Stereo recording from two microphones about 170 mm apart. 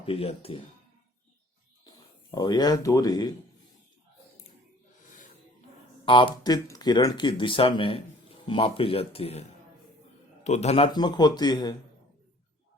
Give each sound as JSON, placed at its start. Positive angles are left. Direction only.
{"t": 0.0, "sound": "speech", "side_deg": 35}
{"t": 2.3, "sound": "speech", "side_deg": 25}
{"t": 6.1, "sound": "speech", "side_deg": 30}